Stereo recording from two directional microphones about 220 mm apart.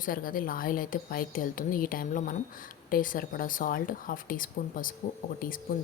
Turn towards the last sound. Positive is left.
turn(degrees=40)  # may be behind; listen again after turning